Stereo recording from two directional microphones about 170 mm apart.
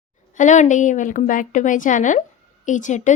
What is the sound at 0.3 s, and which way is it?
A woman's voice, 45° left (ahead or behind).